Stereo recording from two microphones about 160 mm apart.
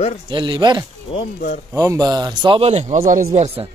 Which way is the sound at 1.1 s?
35° left (ahead or behind).